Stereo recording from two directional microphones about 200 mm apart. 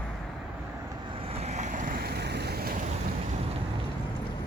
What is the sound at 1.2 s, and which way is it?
Vehicle, 30° right (ahead or behind).